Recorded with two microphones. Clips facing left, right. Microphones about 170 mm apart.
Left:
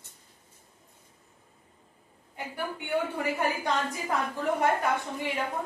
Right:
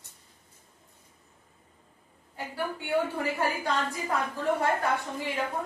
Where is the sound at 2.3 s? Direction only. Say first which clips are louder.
Right 1 dB; 20° left (ahead or behind).